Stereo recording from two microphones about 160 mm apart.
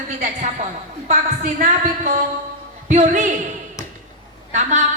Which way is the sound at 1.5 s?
55° right (ahead or behind).